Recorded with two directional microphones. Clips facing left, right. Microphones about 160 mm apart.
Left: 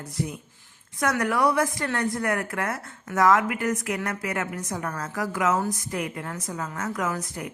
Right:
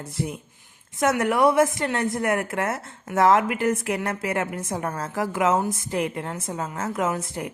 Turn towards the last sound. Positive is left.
turn(degrees=-25)  # may be behind; listen again after turning